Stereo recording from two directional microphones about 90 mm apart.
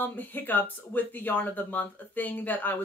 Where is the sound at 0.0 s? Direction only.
20° left (ahead or behind).